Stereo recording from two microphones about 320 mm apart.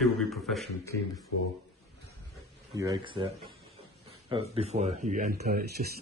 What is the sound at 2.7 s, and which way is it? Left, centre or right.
Speech, centre.